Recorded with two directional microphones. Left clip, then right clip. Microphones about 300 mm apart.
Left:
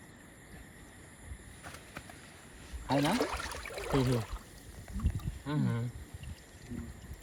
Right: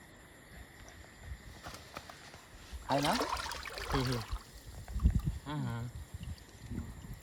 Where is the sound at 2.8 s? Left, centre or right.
Centre.